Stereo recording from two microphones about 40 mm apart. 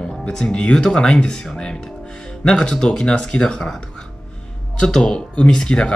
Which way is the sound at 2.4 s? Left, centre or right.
Centre.